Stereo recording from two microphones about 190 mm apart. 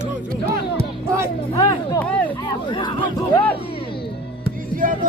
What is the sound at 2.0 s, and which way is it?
Speech, 5° left (ahead or behind).